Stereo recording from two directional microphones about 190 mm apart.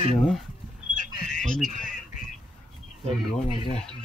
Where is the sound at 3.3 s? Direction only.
25° left (ahead or behind).